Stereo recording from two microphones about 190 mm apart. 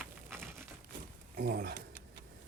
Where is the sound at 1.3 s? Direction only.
50° right (ahead or behind).